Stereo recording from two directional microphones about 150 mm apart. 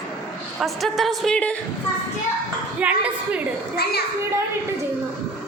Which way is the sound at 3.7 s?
90° left.